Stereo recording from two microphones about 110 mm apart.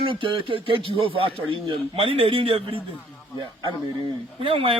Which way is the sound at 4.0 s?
45° right (ahead or behind).